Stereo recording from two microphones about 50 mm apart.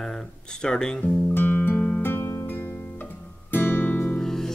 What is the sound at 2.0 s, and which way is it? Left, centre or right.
Music, left.